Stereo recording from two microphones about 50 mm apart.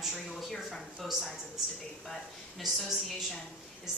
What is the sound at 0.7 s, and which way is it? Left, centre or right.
Speech, centre.